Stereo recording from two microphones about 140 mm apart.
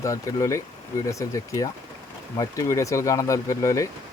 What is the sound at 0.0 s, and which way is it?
Speech, 20° left (ahead or behind).